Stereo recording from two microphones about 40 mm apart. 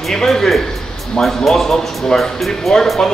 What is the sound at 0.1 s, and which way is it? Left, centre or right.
Speech, centre.